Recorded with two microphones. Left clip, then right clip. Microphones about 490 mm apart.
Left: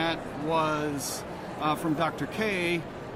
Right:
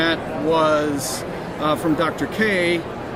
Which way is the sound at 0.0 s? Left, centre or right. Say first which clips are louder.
Right 10 dB; left.